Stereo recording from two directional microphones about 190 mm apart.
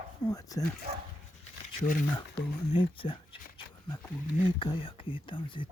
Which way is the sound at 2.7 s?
25° left (ahead or behind).